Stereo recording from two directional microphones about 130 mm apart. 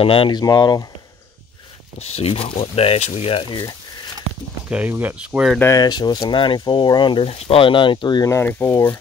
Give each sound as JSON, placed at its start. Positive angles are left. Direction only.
{"t": 0.0, "sound": "speech", "side_deg": 45}
{"t": 0.4, "sound": "speech", "side_deg": 30}
{"t": 2.0, "sound": "speech", "side_deg": 50}
{"t": 4.6, "sound": "speech", "side_deg": -10}
{"t": 5.6, "sound": "speech", "side_deg": 25}
{"t": 8.3, "sound": "speech", "side_deg": 15}